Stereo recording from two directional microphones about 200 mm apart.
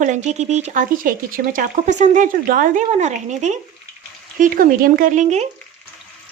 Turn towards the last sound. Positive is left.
turn(degrees=-35)  # may be behind; listen again after turning